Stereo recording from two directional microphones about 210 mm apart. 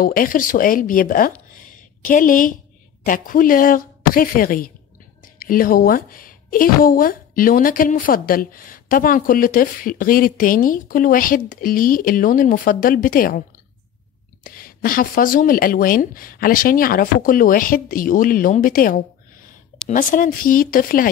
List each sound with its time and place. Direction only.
0.0 s a woman's voice: 40° left (ahead or behind)
14.4 s a woman's voice: 45° left (ahead or behind)